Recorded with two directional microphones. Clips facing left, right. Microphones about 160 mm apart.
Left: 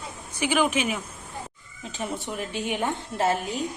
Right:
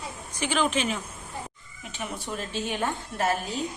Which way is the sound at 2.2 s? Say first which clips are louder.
Left 2 dB; 15° left (ahead or behind).